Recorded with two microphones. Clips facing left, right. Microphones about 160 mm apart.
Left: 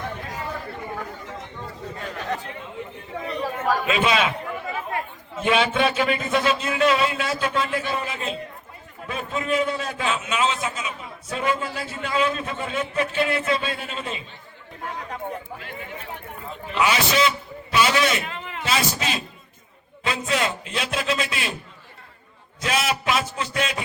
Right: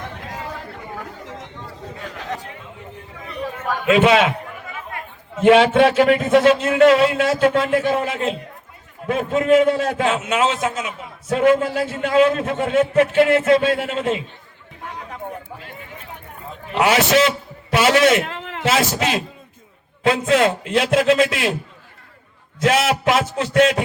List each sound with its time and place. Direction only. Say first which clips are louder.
3.8 s a man's voice: right 11 dB; 75° right (ahead or behind)
5.4 s a man's voice: right 9 dB; 75° right (ahead or behind)
16.7 s a man's voice: right 6 dB; 75° right (ahead or behind)
22.6 s a man's voice: right 7 dB; 85° right